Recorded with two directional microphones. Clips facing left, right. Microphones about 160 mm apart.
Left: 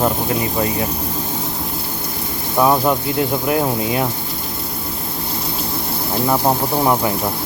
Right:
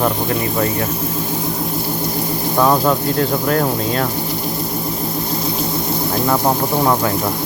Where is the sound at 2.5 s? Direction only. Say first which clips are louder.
Even; 10° left (ahead or behind).